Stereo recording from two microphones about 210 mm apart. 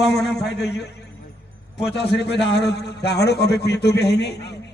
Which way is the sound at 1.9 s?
55° left (ahead or behind).